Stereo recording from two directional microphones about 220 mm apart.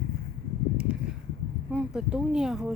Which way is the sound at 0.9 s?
5° right (ahead or behind).